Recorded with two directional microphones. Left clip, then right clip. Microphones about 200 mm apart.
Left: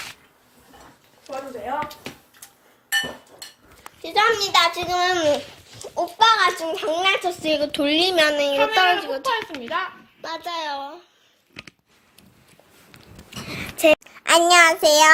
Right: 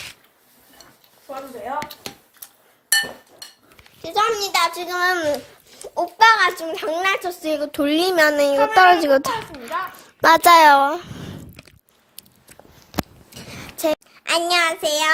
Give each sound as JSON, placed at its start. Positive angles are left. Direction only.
{"t": 4.0, "sound": "a child's voice", "side_deg": -10}
{"t": 5.8, "sound": "a child's voice", "side_deg": -25}
{"t": 7.9, "sound": "speech", "side_deg": -35}
{"t": 9.3, "sound": "a child's voice", "side_deg": 0}
{"t": 10.2, "sound": "a child's voice", "side_deg": -50}
{"t": 12.9, "sound": "a sound", "side_deg": 0}